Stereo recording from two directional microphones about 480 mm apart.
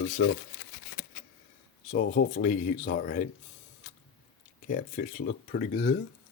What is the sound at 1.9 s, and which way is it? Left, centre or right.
Speech, centre.